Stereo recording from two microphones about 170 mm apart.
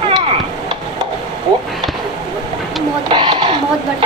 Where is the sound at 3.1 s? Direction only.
30° right (ahead or behind).